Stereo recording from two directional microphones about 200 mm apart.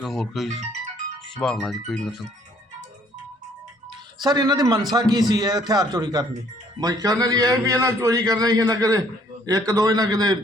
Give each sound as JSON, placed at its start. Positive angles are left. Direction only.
{"t": 0.0, "sound": "speech", "side_deg": 0}
{"t": 4.2, "sound": "a man's voice", "side_deg": -20}